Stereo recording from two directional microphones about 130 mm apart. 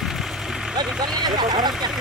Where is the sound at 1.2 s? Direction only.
35° right (ahead or behind).